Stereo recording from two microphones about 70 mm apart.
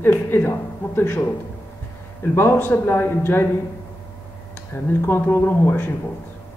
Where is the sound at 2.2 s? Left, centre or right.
Left.